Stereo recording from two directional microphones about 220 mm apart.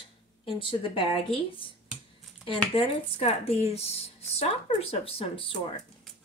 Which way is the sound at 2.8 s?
25° left (ahead or behind).